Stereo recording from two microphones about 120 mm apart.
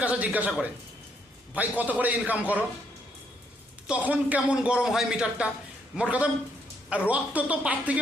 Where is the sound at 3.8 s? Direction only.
10° right (ahead or behind).